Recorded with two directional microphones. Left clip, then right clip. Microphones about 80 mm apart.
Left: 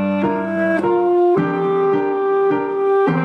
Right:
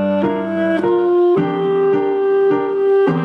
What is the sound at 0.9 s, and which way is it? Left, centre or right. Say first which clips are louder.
Music: right 1 dB; right.